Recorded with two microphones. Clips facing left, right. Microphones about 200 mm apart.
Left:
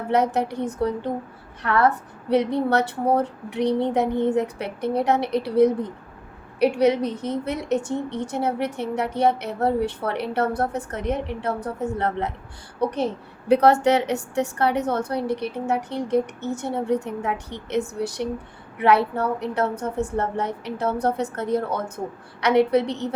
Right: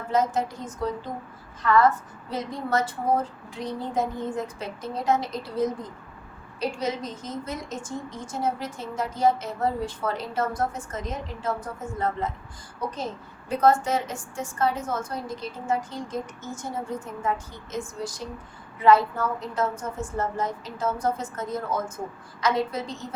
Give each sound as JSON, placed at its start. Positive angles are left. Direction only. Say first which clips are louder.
{"t": 0.1, "sound": "a woman's voice", "louder": "left 3 dB", "side_deg": 65}